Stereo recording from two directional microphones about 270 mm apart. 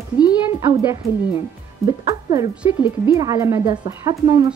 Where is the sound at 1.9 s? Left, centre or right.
Centre.